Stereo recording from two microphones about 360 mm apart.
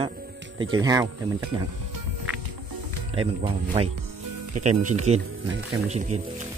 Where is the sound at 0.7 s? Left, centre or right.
Centre.